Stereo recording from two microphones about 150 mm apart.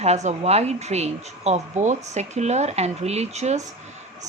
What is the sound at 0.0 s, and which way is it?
Speech, 50° right (ahead or behind).